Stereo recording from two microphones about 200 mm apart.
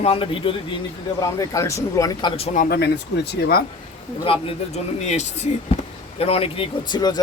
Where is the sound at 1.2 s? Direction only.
15° left (ahead or behind).